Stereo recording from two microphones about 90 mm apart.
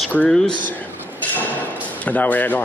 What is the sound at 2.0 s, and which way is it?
Speech, 20° left (ahead or behind).